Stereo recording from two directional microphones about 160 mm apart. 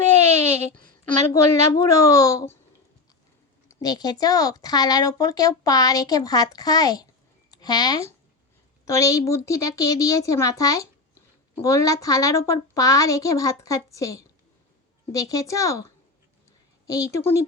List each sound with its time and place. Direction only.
1.3 s speech: 20° left (ahead or behind)
3.8 s speech: 25° left (ahead or behind)
16.8 s speech: 20° left (ahead or behind)